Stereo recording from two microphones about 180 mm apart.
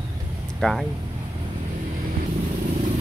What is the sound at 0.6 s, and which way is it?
Speech, centre (ahead or behind).